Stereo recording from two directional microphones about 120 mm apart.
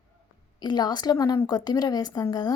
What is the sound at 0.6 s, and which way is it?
A woman's voice, 35° left (ahead or behind).